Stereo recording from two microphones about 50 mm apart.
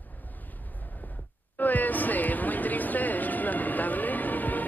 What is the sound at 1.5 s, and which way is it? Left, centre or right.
Music, left.